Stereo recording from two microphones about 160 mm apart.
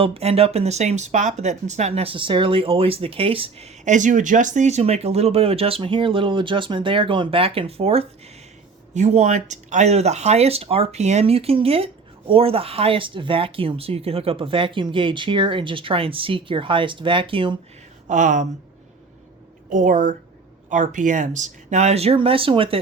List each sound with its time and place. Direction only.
0.0 s speech: 40° right (ahead or behind)
3.8 s speech: 50° right (ahead or behind); by 17.6 s 35° right (ahead or behind)
18.1 s speech: 50° right (ahead or behind)
19.7 s speech: 55° right (ahead or behind); by 22.8 s 35° right (ahead or behind)